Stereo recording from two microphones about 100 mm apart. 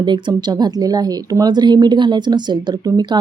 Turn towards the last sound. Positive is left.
turn(degrees=-45)  # may be behind; listen again after turning